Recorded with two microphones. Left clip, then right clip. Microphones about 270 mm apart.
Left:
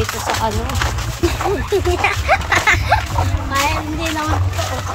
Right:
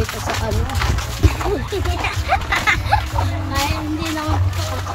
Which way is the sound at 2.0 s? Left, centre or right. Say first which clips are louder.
Left 4 dB; centre.